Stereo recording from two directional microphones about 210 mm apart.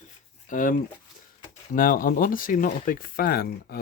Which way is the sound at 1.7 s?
40° left (ahead or behind).